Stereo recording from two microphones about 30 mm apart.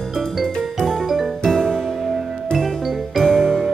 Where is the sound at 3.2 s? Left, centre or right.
Left.